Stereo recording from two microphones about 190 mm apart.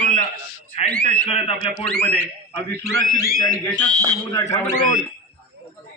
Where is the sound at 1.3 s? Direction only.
30° left (ahead or behind).